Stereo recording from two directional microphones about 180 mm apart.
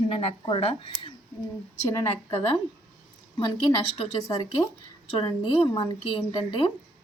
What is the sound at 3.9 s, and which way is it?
A woman's voice, 25° left (ahead or behind).